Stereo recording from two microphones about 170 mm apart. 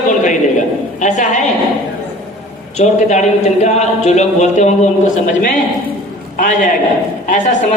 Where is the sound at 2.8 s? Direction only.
45° left (ahead or behind).